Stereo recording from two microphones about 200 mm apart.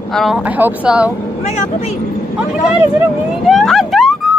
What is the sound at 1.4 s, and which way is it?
Speech, 35° left (ahead or behind).